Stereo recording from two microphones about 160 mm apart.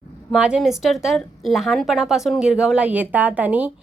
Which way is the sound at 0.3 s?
5° right (ahead or behind).